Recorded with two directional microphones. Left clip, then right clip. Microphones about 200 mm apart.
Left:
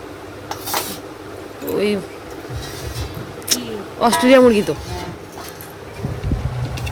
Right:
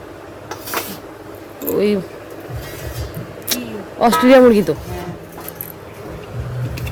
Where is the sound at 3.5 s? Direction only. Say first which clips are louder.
Left 2 dB; 15° right (ahead or behind).